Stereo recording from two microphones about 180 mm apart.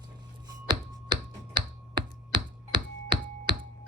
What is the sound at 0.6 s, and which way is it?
Finger snapping, 25° right (ahead or behind).